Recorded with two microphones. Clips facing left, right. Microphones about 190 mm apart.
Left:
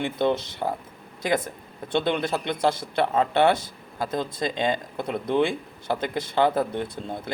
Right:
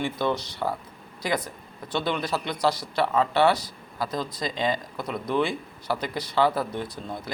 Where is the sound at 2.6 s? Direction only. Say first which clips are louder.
Even; 50° left (ahead or behind).